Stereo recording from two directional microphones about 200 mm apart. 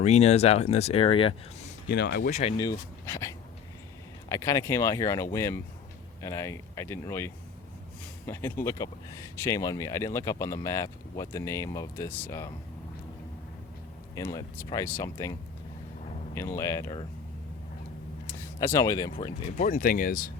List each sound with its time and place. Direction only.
0.0 s speech: 35° left (ahead or behind)
1.9 s speech: 55° left (ahead or behind)
2.3 s speech: 30° left (ahead or behind)
2.6 s speech: 15° left (ahead or behind)
4.3 s speech: 15° left (ahead or behind)
8.3 s speech: 10° left (ahead or behind)
14.2 s speech: 15° left (ahead or behind)
18.6 s speech: 15° left (ahead or behind)
19.5 s speech: 45° left (ahead or behind)